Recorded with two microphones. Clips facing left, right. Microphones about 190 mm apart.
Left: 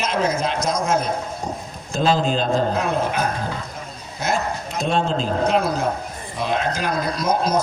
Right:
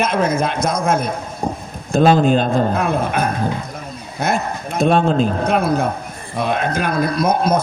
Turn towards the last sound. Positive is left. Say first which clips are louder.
# right 4 dB
turn(degrees=-55)  # may be behind; listen again after turning